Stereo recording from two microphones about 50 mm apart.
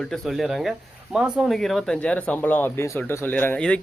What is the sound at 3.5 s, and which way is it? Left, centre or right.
Speech, left.